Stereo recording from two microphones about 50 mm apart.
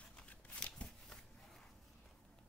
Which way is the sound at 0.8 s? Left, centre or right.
Centre.